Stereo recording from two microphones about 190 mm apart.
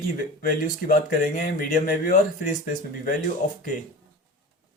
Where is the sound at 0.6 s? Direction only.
45° left (ahead or behind).